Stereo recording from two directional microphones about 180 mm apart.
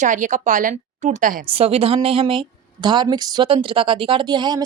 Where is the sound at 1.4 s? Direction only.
30° right (ahead or behind).